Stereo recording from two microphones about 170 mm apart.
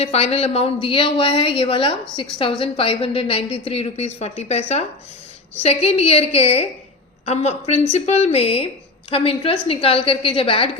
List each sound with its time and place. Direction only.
0.0 s speech: 35° left (ahead or behind)